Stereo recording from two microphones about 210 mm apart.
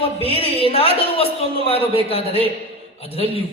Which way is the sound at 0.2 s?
25° left (ahead or behind).